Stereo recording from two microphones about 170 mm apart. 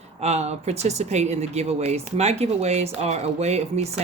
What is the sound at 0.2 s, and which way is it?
Speech, 40° right (ahead or behind).